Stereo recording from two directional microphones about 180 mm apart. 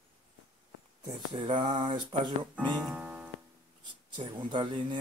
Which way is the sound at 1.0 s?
25° right (ahead or behind).